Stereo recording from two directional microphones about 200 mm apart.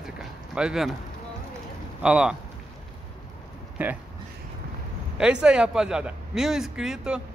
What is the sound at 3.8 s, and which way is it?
Speech, 10° right (ahead or behind).